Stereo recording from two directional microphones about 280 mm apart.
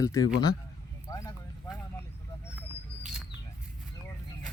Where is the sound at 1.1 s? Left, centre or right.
Centre.